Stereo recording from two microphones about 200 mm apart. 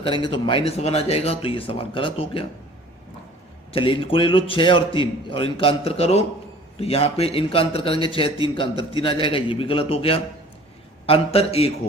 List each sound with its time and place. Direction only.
0.0 s speech: 25° left (ahead or behind)
3.7 s speech: 25° left (ahead or behind)